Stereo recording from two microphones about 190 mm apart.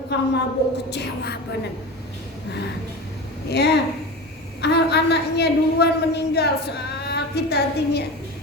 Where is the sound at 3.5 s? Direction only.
60° left (ahead or behind).